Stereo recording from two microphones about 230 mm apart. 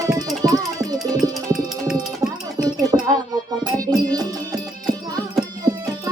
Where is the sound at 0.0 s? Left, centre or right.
Centre.